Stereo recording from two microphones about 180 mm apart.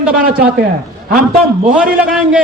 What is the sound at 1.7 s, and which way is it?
Speech, 5° right (ahead or behind).